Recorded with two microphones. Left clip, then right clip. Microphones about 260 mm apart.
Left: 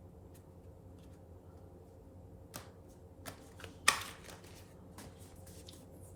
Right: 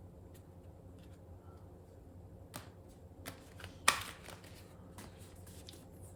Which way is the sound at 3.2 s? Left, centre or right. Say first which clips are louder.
Even; centre.